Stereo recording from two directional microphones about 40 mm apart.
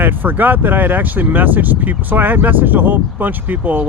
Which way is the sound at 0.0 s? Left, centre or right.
Right.